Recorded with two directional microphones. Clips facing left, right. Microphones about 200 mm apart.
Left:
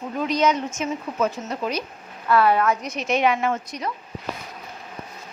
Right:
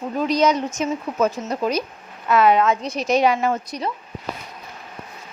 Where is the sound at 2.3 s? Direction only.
20° right (ahead or behind); by 3.9 s 35° right (ahead or behind).